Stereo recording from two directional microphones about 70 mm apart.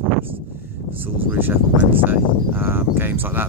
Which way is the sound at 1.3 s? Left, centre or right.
Right.